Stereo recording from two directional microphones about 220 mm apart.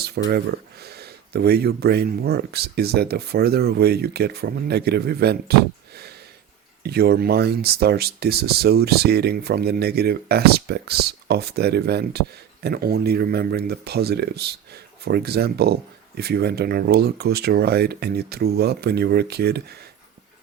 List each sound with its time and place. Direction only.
0.3 s speech: 45° right (ahead or behind)
6.8 s speech: 45° right (ahead or behind)